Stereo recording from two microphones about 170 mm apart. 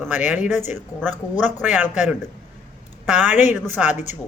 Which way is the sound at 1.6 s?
10° right (ahead or behind).